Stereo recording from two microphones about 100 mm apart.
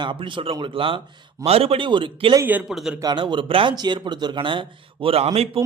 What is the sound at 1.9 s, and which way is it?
Speech, 55° right (ahead or behind).